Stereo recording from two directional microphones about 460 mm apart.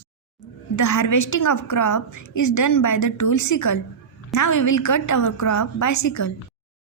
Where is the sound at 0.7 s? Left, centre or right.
Left.